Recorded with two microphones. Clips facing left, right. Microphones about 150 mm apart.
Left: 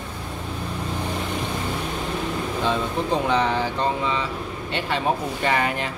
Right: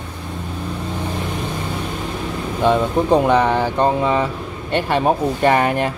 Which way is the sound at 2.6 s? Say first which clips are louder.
Right 9 dB; 55° right (ahead or behind).